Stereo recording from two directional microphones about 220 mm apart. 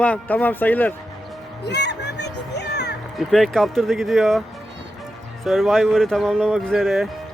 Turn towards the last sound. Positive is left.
turn(degrees=0)  # may be behind; listen again after turning